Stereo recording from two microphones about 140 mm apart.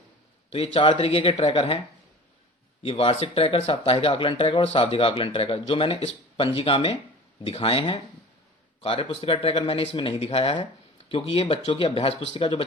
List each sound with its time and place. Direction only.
0.5 s speech: 45° left (ahead or behind)
2.8 s speech: 40° left (ahead or behind)